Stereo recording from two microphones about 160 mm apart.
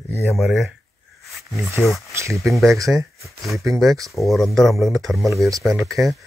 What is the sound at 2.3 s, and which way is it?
Speech, centre (ahead or behind).